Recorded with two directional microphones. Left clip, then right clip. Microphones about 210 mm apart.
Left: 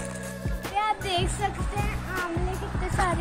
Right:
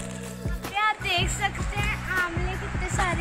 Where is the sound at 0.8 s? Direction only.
5° left (ahead or behind).